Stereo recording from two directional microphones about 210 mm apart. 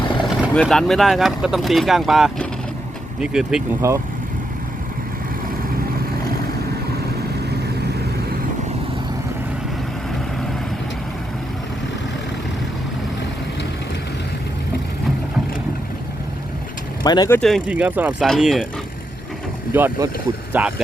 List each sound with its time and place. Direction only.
0.4 s speech: centre (ahead or behind)
17.0 s speech: 20° left (ahead or behind)
17.4 s speech: centre (ahead or behind)
19.7 s speech: 10° right (ahead or behind)